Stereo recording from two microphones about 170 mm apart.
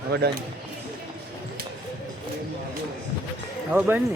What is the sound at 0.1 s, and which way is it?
Speech, 75° right (ahead or behind).